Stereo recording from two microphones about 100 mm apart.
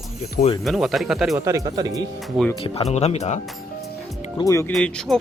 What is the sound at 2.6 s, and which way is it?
Speech, 85° left.